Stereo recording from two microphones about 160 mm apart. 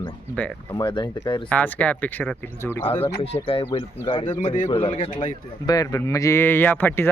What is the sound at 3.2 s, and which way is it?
Speech, 35° left (ahead or behind).